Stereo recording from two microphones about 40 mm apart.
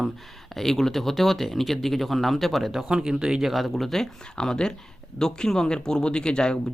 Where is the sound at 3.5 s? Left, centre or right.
Centre.